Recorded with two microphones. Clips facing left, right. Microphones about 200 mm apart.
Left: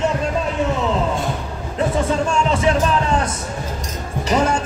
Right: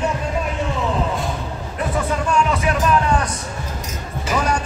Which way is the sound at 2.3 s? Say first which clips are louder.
Right 2 dB; 25° left (ahead or behind).